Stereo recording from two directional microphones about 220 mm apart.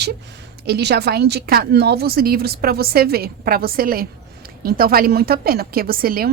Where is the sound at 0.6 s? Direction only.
50° right (ahead or behind).